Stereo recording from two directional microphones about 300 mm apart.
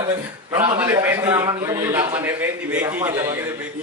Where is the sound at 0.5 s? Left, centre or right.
Centre.